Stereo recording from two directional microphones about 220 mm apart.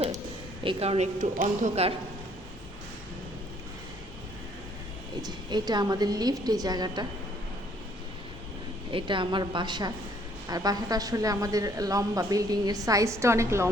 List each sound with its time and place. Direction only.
0.6 s speech: 25° right (ahead or behind)
5.2 s a woman's voice: 20° right (ahead or behind)
8.9 s a woman's voice: 25° right (ahead or behind)